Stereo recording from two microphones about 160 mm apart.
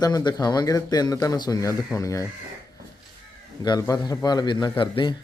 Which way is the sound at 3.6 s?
25° left (ahead or behind).